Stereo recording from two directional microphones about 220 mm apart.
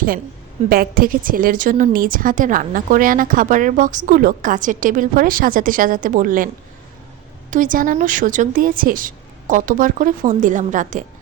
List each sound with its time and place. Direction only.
0.7 s a woman's voice: 40° right (ahead or behind)
7.5 s a woman's voice: 35° right (ahead or behind)